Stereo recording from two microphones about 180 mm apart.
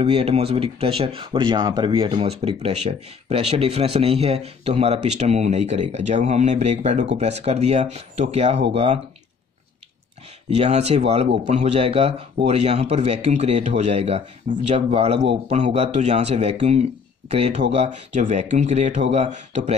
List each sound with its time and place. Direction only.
0.0 s speech: 35° right (ahead or behind)
10.5 s speech: 35° right (ahead or behind)
15.1 s a man's voice: 75° right (ahead or behind)
15.5 s speech: 40° right (ahead or behind)